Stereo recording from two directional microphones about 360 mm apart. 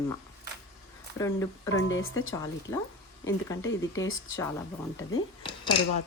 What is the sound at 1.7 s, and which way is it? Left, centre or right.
Speech, left.